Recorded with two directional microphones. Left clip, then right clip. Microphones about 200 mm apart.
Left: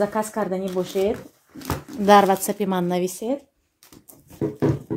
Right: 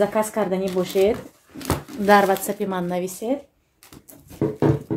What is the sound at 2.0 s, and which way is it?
Speech, 35° left (ahead or behind).